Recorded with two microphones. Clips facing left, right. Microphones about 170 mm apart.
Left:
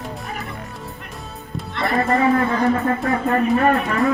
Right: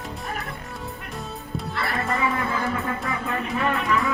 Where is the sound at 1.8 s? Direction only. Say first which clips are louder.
Left 9 dB; 40° left (ahead or behind).